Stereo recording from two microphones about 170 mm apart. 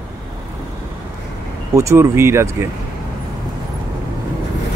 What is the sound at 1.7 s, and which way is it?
Speech, 15° right (ahead or behind).